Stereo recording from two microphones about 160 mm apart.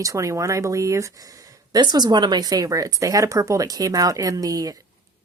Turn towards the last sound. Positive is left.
turn(degrees=-25)  # may be behind; listen again after turning